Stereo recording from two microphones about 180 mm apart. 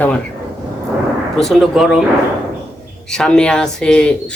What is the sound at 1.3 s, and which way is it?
Speech, centre (ahead or behind).